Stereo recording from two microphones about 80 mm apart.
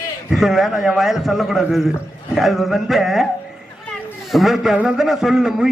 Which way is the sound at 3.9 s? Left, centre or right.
Centre.